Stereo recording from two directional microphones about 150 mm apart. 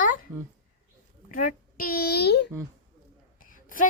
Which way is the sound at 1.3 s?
70° left (ahead or behind).